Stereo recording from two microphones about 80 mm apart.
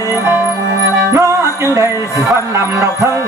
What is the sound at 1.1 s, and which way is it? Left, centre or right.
Music, right.